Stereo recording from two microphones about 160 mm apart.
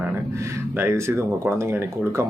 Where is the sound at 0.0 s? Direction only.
20° right (ahead or behind).